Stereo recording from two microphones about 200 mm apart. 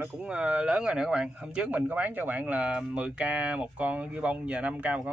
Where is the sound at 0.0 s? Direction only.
5° right (ahead or behind).